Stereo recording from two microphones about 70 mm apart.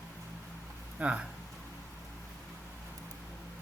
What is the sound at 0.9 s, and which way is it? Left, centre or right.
Speech, centre.